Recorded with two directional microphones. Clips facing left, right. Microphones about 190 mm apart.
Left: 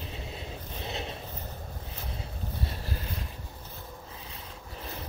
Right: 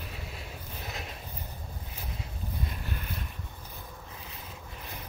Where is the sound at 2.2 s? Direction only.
35° left (ahead or behind).